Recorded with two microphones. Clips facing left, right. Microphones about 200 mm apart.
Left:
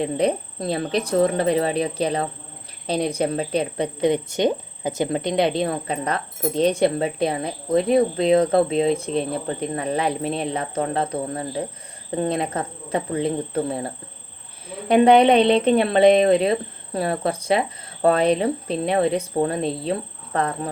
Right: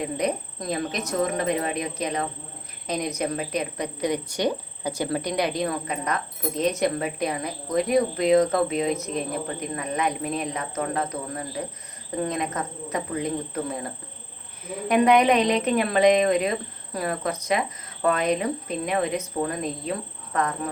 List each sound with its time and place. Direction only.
0.0 s a woman's voice: 30° left (ahead or behind)